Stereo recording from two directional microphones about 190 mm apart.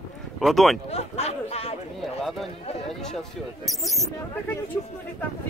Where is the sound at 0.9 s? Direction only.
35° left (ahead or behind).